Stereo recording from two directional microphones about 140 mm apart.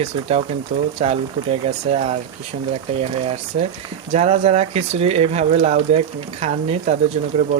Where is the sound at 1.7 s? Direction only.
50° right (ahead or behind).